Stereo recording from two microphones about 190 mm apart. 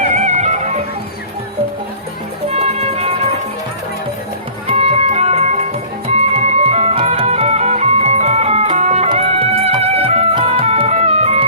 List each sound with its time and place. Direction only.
0.1 s music: 35° right (ahead or behind)
2.5 s music: 35° right (ahead or behind)
4.6 s music: 30° right (ahead or behind)